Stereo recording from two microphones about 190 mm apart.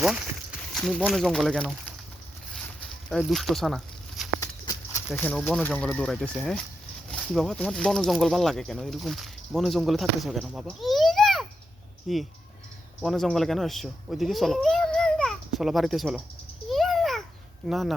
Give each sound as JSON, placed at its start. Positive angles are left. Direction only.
{"t": 0.7, "sound": "speech", "side_deg": 0}
{"t": 3.1, "sound": "speech", "side_deg": 0}
{"t": 4.4, "sound": "horse", "side_deg": 15}
{"t": 5.1, "sound": "speech", "side_deg": 5}
{"t": 16.6, "sound": "a sound", "side_deg": 0}
{"t": 17.7, "sound": "speech", "side_deg": 0}